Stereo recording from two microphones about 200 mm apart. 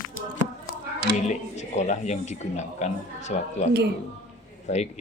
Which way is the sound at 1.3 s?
35° left (ahead or behind).